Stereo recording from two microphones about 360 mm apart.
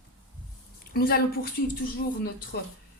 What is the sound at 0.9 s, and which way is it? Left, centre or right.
Speech, left.